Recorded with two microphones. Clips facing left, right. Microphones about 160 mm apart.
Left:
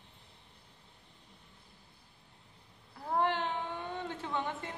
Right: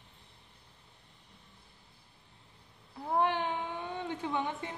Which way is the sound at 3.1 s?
15° right (ahead or behind).